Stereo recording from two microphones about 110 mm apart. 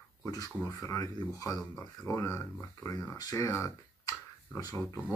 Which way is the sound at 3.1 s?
35° left (ahead or behind).